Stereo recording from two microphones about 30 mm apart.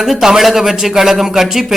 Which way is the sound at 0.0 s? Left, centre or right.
Centre.